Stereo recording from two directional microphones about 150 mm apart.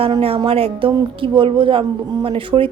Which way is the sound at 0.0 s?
40° right (ahead or behind).